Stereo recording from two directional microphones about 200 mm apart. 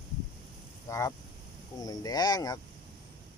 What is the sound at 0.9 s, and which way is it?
A man's voice, 15° left (ahead or behind).